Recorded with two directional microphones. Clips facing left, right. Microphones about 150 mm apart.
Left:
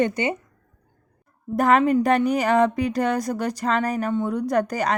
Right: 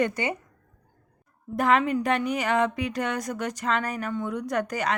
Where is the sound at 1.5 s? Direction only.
40° left (ahead or behind).